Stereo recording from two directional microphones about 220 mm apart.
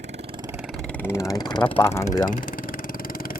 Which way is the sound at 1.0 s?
15° left (ahead or behind).